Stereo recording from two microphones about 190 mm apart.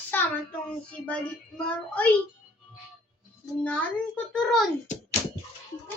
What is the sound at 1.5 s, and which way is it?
Speech, 5° left (ahead or behind).